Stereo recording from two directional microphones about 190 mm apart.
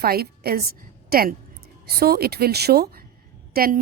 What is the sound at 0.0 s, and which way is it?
A woman's voice, 55° right (ahead or behind).